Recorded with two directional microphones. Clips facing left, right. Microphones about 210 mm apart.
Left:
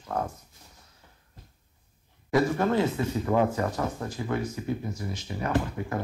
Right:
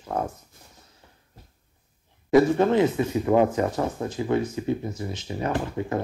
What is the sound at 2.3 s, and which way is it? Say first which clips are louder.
Speech: right 6 dB; 20° right (ahead or behind).